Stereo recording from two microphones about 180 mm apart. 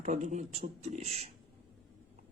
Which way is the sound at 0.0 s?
40° right (ahead or behind).